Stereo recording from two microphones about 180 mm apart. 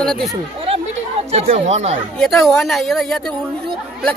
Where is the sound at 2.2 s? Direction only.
Centre (ahead or behind).